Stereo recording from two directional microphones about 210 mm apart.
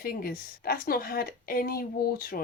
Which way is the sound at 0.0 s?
45° left (ahead or behind).